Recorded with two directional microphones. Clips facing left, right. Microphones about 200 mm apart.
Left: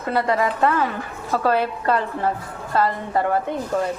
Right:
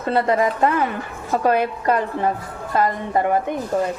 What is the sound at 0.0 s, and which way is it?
A woman's voice, 25° right (ahead or behind).